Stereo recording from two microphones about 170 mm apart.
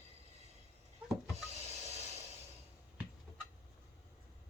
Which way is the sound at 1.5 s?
40° right (ahead or behind).